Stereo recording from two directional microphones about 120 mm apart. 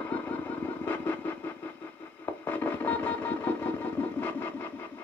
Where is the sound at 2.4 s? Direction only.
15° left (ahead or behind).